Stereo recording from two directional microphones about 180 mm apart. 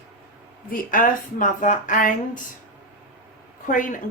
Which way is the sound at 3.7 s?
45° left (ahead or behind).